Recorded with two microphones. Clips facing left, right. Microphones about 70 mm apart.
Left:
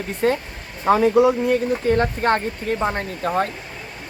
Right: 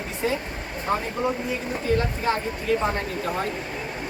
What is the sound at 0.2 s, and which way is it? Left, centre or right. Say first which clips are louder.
Speech: left 6 dB; left.